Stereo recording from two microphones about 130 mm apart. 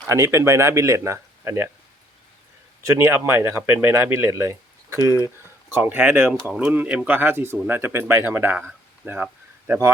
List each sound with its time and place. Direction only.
0.1 s speech: 25° right (ahead or behind)
2.8 s speech: 20° right (ahead or behind)
6.5 s speech: 5° right (ahead or behind)